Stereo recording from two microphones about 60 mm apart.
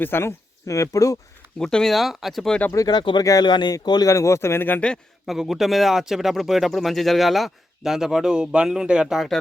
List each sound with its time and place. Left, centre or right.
0.0 s speech: left
0.6 s speech: left
1.5 s speech: centre
2.7 s speech: left
4.1 s speech: left
4.8 s a man's voice: centre
5.2 s speech: centre